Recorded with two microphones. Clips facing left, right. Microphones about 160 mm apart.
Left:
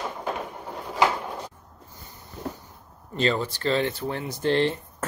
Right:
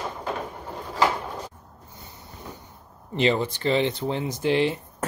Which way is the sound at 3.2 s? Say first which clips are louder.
Right 2 dB; 20° right (ahead or behind).